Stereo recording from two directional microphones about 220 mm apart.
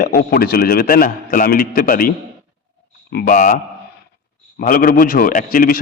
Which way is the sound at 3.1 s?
40° left (ahead or behind).